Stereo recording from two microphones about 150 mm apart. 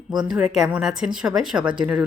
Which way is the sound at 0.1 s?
30° right (ahead or behind).